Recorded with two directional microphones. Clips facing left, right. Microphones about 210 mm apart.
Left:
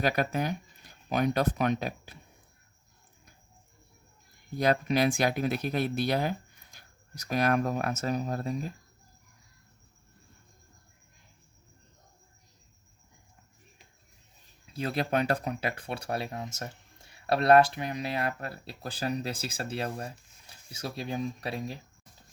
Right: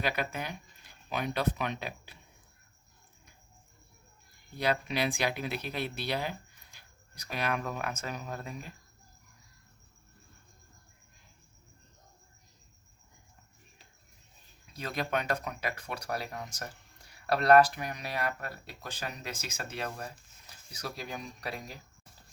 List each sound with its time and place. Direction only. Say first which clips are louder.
0.0 s speech: left 6 dB; 40° left (ahead or behind)
4.5 s speech: left 5 dB; 45° left (ahead or behind)
14.7 s speech: left 4 dB; 30° left (ahead or behind)